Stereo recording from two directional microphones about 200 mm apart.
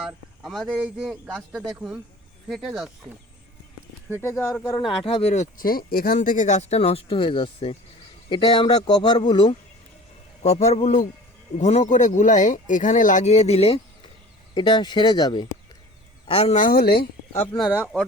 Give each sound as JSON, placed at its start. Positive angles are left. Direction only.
{"t": 0.0, "sound": "a sound", "side_deg": 0}
{"t": 0.6, "sound": "speech", "side_deg": -10}
{"t": 4.2, "sound": "speech", "side_deg": 15}
{"t": 4.9, "sound": "a man's voice", "side_deg": 25}
{"t": 17.6, "sound": "speech", "side_deg": -5}